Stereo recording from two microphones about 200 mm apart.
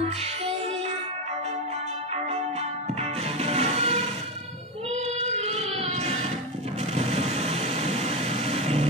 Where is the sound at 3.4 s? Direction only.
30° right (ahead or behind).